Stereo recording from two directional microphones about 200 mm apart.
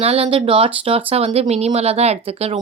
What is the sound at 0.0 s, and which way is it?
Speech, 30° right (ahead or behind).